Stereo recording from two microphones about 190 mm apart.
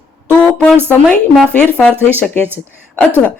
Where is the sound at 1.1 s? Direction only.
5° left (ahead or behind).